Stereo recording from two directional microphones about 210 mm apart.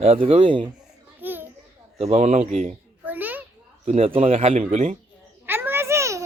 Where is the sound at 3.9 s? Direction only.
25° right (ahead or behind).